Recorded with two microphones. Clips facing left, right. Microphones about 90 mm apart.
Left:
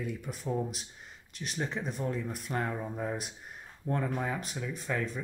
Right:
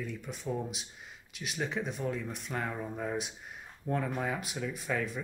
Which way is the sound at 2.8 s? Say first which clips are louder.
Left 1 dB; 15° left (ahead or behind).